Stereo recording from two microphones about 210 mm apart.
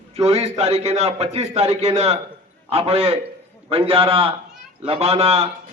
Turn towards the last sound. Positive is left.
turn(degrees=-30)  # may be behind; listen again after turning